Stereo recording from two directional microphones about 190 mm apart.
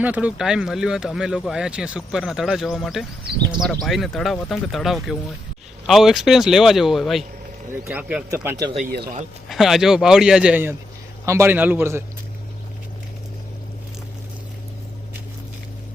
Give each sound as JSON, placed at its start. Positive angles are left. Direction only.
{"t": 0.0, "sound": "speech", "side_deg": -5}
{"t": 8.3, "sound": "a man's voice", "side_deg": -15}
{"t": 9.5, "sound": "a man's voice", "side_deg": 0}